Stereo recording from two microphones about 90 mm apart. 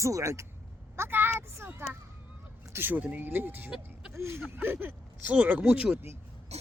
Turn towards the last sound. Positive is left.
turn(degrees=-15)  # may be behind; listen again after turning